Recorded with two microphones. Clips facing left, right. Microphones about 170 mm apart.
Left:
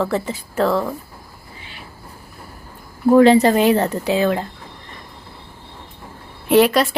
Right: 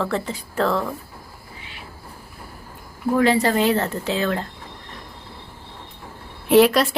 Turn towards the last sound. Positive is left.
turn(degrees=0)  # may be behind; listen again after turning